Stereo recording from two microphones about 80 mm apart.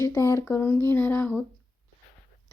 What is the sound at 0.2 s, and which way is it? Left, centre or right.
Speech, left.